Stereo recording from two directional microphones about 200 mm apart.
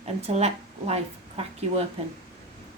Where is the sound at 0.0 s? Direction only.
30° right (ahead or behind).